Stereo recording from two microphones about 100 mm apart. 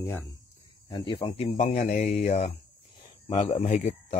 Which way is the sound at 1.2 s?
80° left.